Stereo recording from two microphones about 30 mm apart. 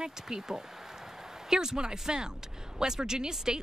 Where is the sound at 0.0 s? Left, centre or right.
Centre.